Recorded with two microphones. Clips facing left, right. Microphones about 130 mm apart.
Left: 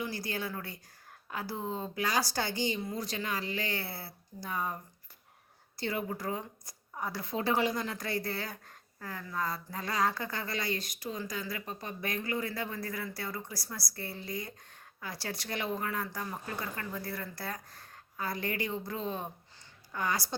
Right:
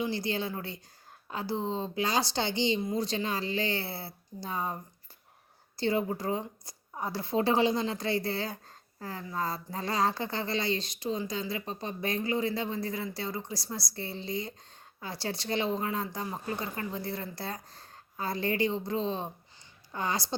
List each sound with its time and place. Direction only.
0.0 s a woman's voice: 25° right (ahead or behind)